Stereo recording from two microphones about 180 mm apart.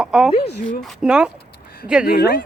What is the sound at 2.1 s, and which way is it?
Speech, 60° left (ahead or behind).